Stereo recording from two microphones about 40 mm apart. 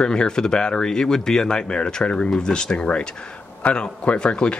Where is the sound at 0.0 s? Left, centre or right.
Centre.